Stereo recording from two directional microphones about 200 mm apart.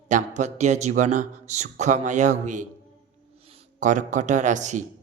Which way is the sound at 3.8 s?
40° right (ahead or behind).